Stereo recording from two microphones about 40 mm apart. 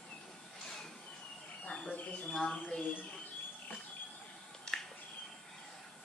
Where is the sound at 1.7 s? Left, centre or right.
Left.